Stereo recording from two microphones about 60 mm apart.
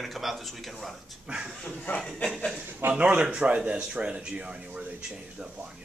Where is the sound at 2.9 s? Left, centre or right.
Right.